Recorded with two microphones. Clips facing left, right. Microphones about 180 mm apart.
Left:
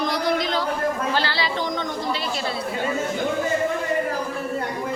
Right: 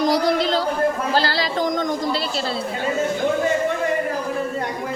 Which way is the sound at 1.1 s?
40° right (ahead or behind).